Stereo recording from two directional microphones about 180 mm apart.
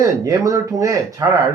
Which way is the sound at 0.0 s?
20° right (ahead or behind).